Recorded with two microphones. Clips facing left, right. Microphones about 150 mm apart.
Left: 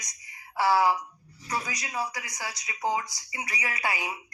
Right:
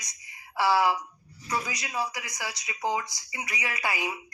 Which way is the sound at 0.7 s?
15° left (ahead or behind).